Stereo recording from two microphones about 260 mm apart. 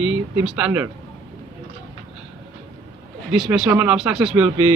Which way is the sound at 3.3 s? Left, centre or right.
Centre.